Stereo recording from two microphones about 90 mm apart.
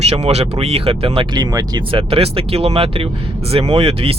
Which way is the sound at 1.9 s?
90° right.